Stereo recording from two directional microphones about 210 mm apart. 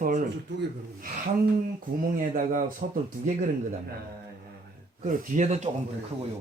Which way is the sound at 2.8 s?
40° right (ahead or behind).